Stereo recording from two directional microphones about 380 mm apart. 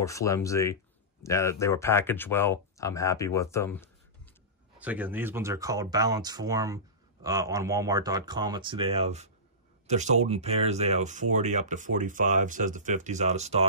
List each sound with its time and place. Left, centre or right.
0.0 s speech: centre
4.7 s speech: centre